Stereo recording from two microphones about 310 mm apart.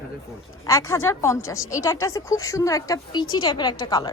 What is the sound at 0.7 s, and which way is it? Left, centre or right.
A woman's voice, centre.